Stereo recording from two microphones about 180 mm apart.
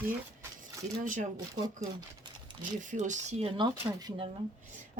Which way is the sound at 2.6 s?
45° right (ahead or behind).